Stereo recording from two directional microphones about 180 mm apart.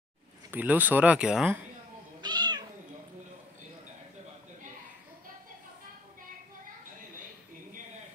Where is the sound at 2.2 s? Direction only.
25° right (ahead or behind).